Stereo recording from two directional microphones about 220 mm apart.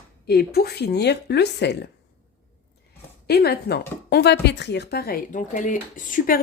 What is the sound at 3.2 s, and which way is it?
A woman's voice, 45° left (ahead or behind).